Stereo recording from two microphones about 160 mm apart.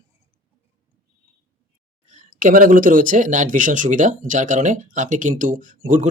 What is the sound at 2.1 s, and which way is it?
Speech, 55° right (ahead or behind).